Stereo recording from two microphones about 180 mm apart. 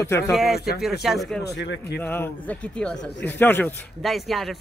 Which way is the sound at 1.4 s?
70° left (ahead or behind).